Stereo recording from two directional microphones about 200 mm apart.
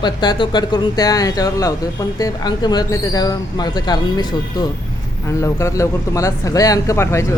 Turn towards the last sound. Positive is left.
turn(degrees=15)  # may be behind; listen again after turning